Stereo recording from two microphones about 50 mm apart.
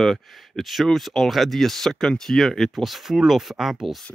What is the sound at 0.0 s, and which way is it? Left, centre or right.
Speech, centre.